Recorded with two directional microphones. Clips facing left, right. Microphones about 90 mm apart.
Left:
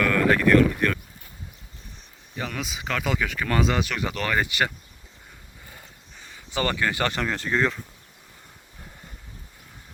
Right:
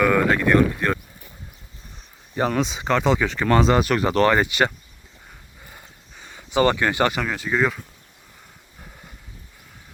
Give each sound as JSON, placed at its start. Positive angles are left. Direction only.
{"t": 0.0, "sound": "speech", "side_deg": -15}
{"t": 2.3, "sound": "speech", "side_deg": -35}
{"t": 3.9, "sound": "speech", "side_deg": -40}
{"t": 6.5, "sound": "speech", "side_deg": -20}
{"t": 7.1, "sound": "speech", "side_deg": -5}